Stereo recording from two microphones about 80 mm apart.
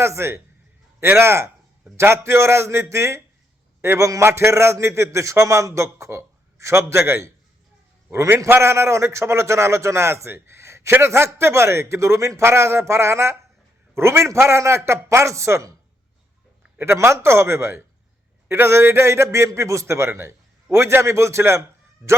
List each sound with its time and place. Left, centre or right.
0.0 s a man's voice: right
16.7 s a man's voice: right